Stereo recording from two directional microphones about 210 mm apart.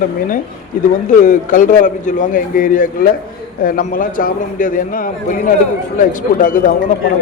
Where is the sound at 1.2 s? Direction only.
40° left (ahead or behind).